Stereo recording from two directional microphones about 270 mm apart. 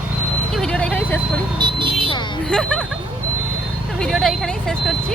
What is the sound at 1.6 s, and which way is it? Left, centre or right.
Vehicle, centre.